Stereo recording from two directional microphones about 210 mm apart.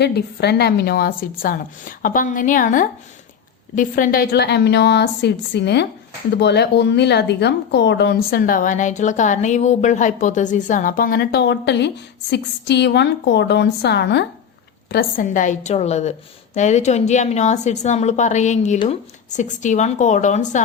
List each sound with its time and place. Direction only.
0.0 s a woman's voice: 50° left (ahead or behind)